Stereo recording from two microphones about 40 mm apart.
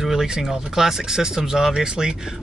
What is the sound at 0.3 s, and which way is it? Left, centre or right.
Speech, centre.